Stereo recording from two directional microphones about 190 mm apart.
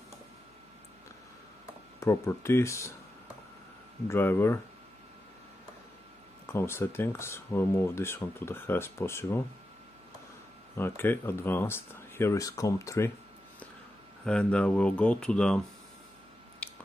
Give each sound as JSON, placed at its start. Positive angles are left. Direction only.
{"t": 2.0, "sound": "speech", "side_deg": 15}
{"t": 4.1, "sound": "speech", "side_deg": 10}
{"t": 6.4, "sound": "speech", "side_deg": 15}
{"t": 10.8, "sound": "speech", "side_deg": 10}
{"t": 14.2, "sound": "speech", "side_deg": 5}
{"t": 16.6, "sound": "a sound", "side_deg": 5}